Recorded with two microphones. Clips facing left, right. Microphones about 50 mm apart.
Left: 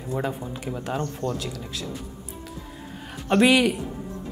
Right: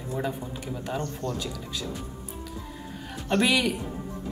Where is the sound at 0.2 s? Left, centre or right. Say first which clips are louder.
Even; centre.